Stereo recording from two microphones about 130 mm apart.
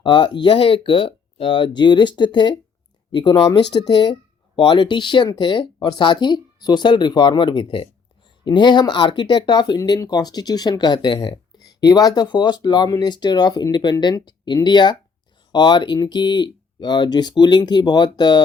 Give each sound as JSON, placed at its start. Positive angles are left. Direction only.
{"t": 0.0, "sound": "speech", "side_deg": 35}